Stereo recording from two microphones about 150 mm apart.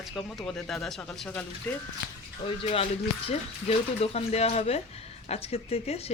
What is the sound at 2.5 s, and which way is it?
Speech, 40° left (ahead or behind).